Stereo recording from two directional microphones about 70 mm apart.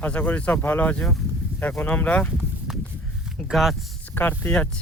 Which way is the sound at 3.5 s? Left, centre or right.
Centre.